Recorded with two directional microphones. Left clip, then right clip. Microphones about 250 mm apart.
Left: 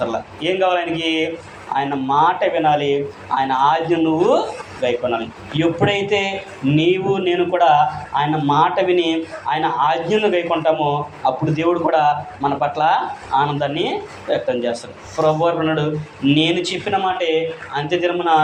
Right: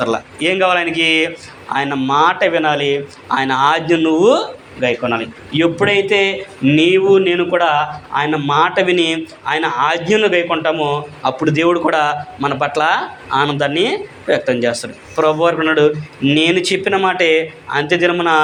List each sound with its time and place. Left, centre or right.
0.0 s a man's voice: right